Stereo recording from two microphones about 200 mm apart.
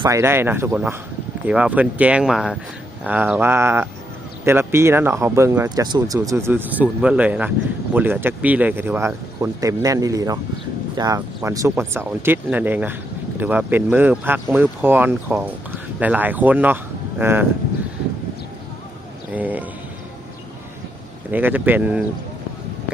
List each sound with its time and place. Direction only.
0.0 s speech: 15° right (ahead or behind)
19.3 s a sound: 10° right (ahead or behind)
21.2 s speech: 10° right (ahead or behind)